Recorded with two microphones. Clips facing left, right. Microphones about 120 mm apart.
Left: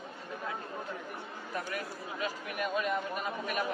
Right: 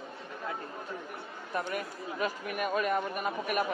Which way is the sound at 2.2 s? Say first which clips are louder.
Right 3 dB; 55° right (ahead or behind).